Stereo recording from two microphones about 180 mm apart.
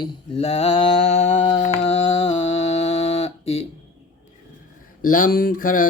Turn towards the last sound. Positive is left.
turn(degrees=50)  # may be behind; listen again after turning